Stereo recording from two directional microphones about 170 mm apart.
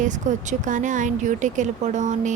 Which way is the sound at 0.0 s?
45° right (ahead or behind).